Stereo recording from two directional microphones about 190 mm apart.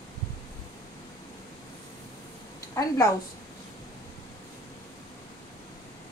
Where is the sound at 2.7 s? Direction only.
20° left (ahead or behind).